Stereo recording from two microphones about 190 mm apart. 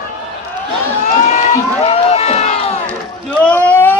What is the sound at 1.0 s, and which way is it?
Crowd, 40° left (ahead or behind).